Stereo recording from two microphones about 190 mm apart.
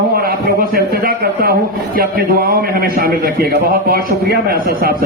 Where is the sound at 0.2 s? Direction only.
50° right (ahead or behind).